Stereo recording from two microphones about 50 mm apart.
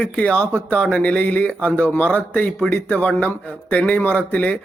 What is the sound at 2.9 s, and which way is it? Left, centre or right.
Speech, left.